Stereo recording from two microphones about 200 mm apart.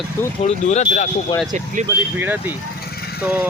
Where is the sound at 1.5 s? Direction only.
40° right (ahead or behind).